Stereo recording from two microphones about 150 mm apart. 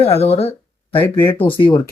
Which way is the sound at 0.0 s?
40° left (ahead or behind).